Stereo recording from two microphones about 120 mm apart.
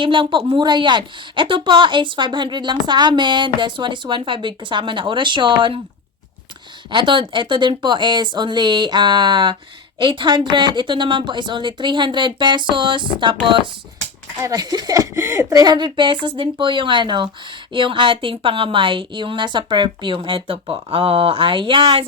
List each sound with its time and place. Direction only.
0.0 s a woman's voice: 45° right (ahead or behind)
6.9 s a woman's voice: 45° right (ahead or behind)
14.4 s speech: 30° right (ahead or behind); by 22.0 s 45° right (ahead or behind)